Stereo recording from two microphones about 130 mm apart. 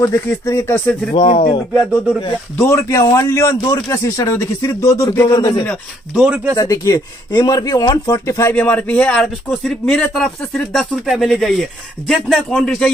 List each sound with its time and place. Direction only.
0.0 s speech: 25° left (ahead or behind)
1.1 s speech: 40° left (ahead or behind)
2.5 s speech: 20° left (ahead or behind)
6.1 s speech: 5° right (ahead or behind)
6.5 s speech: 25° left (ahead or behind)
8.5 s speech: 10° left (ahead or behind)